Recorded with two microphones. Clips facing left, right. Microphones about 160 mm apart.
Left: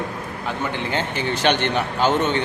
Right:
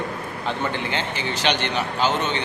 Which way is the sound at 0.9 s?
50° left (ahead or behind).